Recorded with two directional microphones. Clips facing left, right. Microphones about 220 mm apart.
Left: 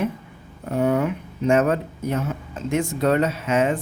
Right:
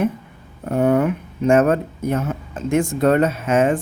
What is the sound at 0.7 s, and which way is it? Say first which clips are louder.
Speech: right 4 dB; 50° right (ahead or behind).